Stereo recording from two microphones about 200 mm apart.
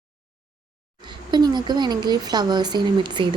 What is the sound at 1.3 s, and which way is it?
Speech, 20° right (ahead or behind).